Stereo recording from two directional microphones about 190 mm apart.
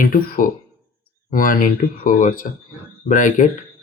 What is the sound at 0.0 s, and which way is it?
Speech, 45° left (ahead or behind).